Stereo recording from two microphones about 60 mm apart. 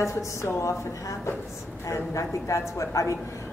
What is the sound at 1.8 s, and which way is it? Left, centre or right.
A woman's voice, left.